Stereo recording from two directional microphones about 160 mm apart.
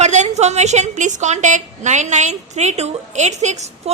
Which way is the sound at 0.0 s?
45° right (ahead or behind).